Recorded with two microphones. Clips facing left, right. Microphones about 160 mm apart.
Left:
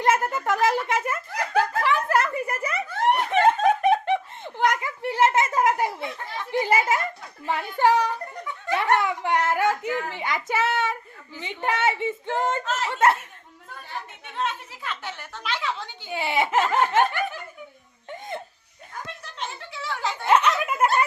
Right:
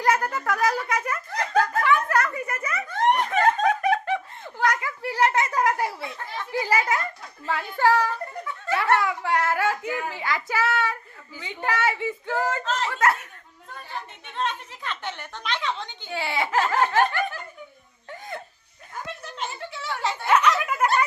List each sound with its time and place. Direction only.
0.0 s speech: 25° left (ahead or behind)
1.3 s snicker: 10° left (ahead or behind)
1.8 s a sound: 30° left (ahead or behind)
6.5 s a child's voice: 25° left (ahead or behind)
12.6 s speech: 10° left (ahead or behind)
12.9 s speech: 25° left (ahead or behind)
14.3 s a woman's voice: 5° left (ahead or behind)
16.1 s speech: 15° left (ahead or behind)
18.1 s laughter: 20° left (ahead or behind)
19.2 s a sound: centre (ahead or behind)
20.2 s a sound: 25° left (ahead or behind)